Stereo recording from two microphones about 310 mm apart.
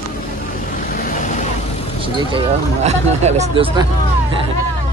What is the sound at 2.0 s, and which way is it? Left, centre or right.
Speech, centre.